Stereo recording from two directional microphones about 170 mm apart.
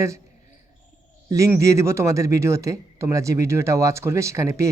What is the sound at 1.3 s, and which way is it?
Speech, 20° right (ahead or behind).